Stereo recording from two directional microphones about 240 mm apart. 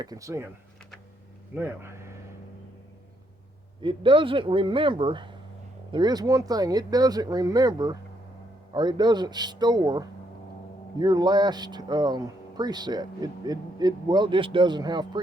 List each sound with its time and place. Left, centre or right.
0.0 s speech: centre
1.5 s speech: centre
3.8 s speech: right